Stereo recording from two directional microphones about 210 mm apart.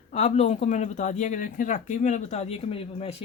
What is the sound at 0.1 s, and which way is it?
Speech, 30° left (ahead or behind).